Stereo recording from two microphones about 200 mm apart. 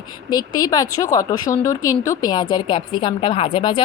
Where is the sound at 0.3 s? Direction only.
20° left (ahead or behind).